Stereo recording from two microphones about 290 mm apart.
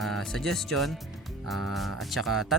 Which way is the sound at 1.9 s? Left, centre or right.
Centre.